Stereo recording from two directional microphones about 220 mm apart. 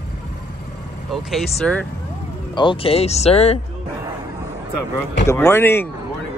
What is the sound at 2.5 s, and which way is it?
Speech, 20° left (ahead or behind).